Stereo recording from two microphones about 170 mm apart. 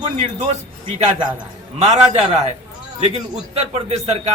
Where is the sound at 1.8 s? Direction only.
40° right (ahead or behind).